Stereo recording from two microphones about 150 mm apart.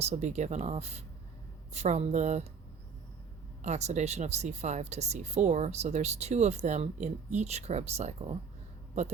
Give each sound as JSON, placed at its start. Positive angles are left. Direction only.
{"t": 0.0, "sound": "speech", "side_deg": -50}
{"t": 3.6, "sound": "speech", "side_deg": -50}